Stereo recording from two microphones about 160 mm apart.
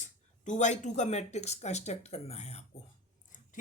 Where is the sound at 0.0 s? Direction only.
50° left (ahead or behind).